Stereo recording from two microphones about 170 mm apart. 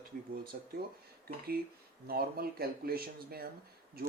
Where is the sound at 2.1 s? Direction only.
65° right (ahead or behind).